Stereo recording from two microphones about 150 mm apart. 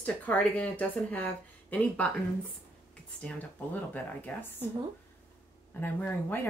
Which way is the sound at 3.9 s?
10° left (ahead or behind).